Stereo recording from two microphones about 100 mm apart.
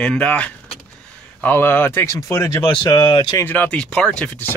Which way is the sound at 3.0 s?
55° left (ahead or behind).